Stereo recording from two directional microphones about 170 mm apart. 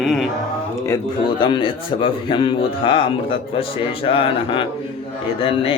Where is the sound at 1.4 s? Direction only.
30° left (ahead or behind).